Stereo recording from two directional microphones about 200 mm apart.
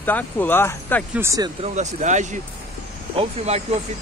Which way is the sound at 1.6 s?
35° right (ahead or behind).